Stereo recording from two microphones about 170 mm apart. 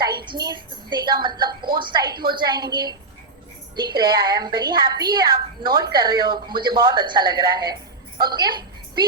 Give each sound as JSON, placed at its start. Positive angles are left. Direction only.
{"t": 0.3, "sound": "a woman's voice", "side_deg": -25}